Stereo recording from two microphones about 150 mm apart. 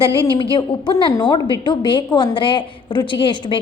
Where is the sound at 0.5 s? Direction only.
30° left (ahead or behind).